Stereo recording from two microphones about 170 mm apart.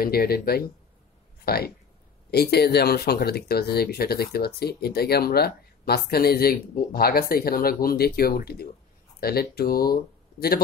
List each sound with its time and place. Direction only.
0.0 s speech: 65° left (ahead or behind)